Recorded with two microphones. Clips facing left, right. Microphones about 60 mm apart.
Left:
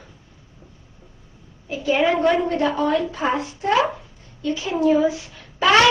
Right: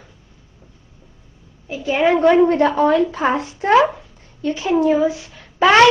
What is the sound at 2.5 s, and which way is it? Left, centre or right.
A woman's voice, right.